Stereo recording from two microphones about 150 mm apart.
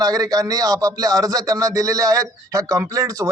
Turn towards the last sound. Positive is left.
turn(degrees=-25)  # may be behind; listen again after turning